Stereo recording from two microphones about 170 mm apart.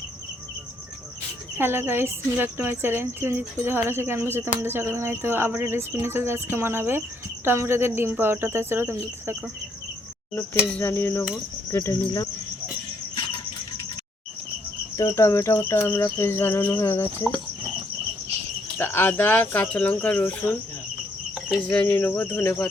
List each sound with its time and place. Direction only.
1.5 s speech: 15° right (ahead or behind)
10.7 s speech: 10° left (ahead or behind)
14.9 s speech: 15° left (ahead or behind)
18.8 s speech: 10° left (ahead or behind)
21.7 s speech: 10° left (ahead or behind)